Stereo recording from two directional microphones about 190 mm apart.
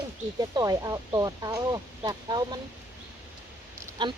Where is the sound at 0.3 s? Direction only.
20° right (ahead or behind).